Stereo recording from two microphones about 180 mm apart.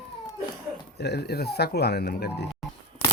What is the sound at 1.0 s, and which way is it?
Speech, 65° left (ahead or behind).